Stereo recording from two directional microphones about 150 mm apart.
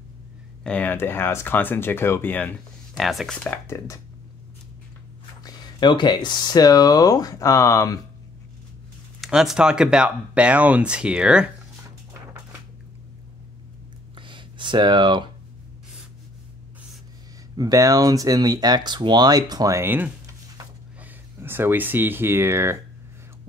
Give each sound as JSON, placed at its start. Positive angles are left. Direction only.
{"t": 0.7, "sound": "speech", "side_deg": 10}
{"t": 3.0, "sound": "speech", "side_deg": 0}
{"t": 5.4, "sound": "speech", "side_deg": 25}
{"t": 9.2, "sound": "speech", "side_deg": 0}
{"t": 14.1, "sound": "a sound", "side_deg": -35}
{"t": 17.6, "sound": "speech", "side_deg": -25}